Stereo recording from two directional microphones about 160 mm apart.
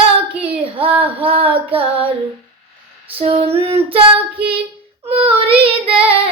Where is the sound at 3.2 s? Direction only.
35° right (ahead or behind).